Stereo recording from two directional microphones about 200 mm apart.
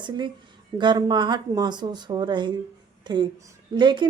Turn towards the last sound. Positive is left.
turn(degrees=-25)  # may be behind; listen again after turning